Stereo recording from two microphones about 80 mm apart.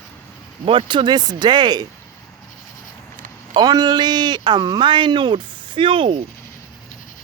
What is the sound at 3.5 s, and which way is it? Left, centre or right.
Speech, right.